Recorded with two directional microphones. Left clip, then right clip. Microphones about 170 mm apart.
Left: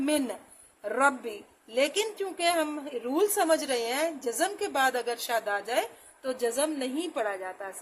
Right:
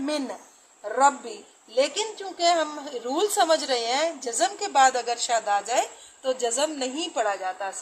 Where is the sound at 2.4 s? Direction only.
80° left.